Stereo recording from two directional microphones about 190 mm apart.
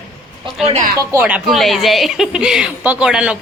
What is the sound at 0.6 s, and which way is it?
Speech, 35° right (ahead or behind).